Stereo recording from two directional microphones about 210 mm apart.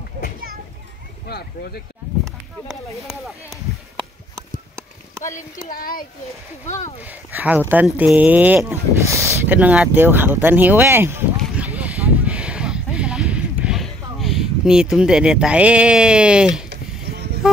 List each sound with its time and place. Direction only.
2.7 s speech: centre (ahead or behind)
5.3 s speech: 40° left (ahead or behind)
7.3 s a sound: 10° right (ahead or behind)
14.2 s speech: centre (ahead or behind)